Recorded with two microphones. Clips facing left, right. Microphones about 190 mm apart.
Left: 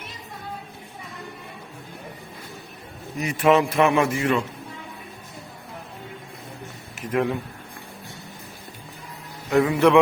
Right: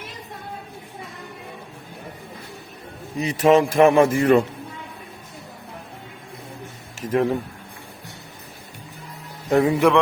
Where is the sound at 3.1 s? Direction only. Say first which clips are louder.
Right 3 dB; 35° right (ahead or behind).